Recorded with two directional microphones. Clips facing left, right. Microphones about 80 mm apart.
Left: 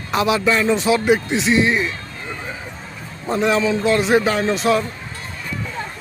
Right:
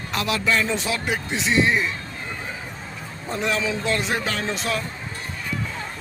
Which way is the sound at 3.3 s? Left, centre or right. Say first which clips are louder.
Left 7 dB; centre.